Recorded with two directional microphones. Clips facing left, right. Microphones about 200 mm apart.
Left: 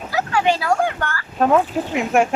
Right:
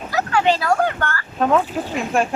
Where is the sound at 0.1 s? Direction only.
10° left (ahead or behind).